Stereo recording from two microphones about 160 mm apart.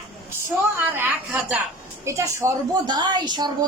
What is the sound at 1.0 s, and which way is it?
A woman's voice, 10° right (ahead or behind).